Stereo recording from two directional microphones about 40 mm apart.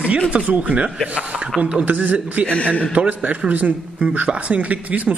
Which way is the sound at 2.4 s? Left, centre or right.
Left.